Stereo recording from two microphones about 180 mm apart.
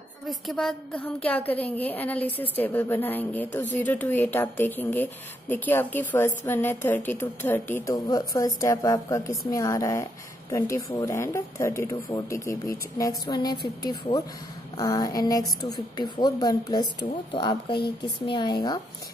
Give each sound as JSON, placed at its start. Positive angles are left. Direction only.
{"t": 0.3, "sound": "a woman's voice", "side_deg": 0}